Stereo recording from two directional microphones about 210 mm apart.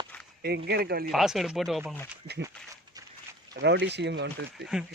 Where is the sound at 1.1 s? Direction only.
Centre (ahead or behind).